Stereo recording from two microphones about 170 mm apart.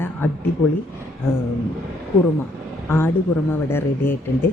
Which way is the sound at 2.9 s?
15° left (ahead or behind).